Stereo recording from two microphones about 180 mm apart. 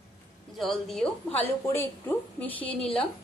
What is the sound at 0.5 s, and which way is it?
A woman's voice, centre (ahead or behind).